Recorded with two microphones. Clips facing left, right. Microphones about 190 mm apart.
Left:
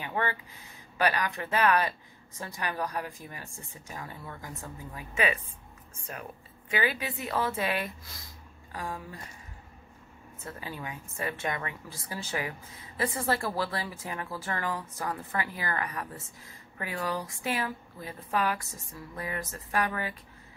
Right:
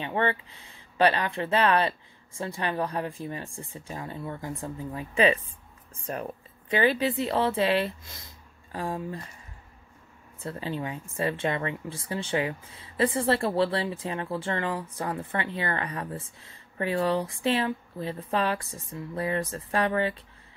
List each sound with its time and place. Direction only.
0.0 s a sound: 25° right (ahead or behind)
0.9 s speech: 25° right (ahead or behind)
6.7 s speech: 35° right (ahead or behind)
10.4 s speech: 30° right (ahead or behind)